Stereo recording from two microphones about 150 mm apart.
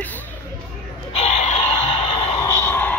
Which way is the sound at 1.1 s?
45° left (ahead or behind).